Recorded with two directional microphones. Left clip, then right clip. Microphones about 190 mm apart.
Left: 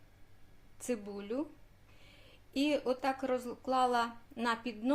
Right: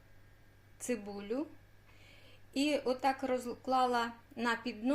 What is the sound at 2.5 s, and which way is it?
A woman's voice, centre (ahead or behind).